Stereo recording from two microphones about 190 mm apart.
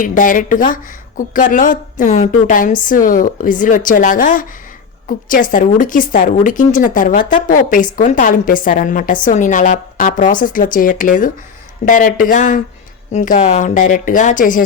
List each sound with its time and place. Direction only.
0.0 s a woman's voice: 45° left (ahead or behind)